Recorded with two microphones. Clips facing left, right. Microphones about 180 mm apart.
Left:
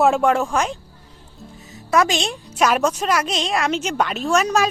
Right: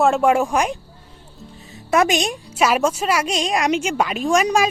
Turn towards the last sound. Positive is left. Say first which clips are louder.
# right 1 dB
turn(degrees=-10)  # may be behind; listen again after turning